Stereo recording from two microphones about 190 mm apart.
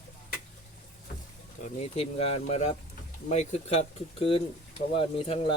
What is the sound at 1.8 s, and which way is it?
Speech, 35° left (ahead or behind).